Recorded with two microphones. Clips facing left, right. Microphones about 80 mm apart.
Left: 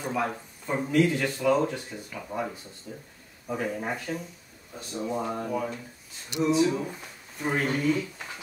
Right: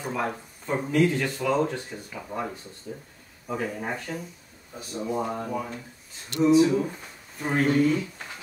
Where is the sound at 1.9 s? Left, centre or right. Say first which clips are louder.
Right 1 dB; centre.